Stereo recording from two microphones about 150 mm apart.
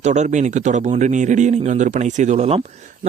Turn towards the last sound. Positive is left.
turn(degrees=-40)  # may be behind; listen again after turning